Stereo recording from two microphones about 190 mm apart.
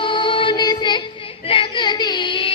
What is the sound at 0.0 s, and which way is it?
Music, 25° left (ahead or behind).